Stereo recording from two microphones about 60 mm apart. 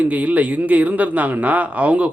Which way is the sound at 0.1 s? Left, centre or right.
Right.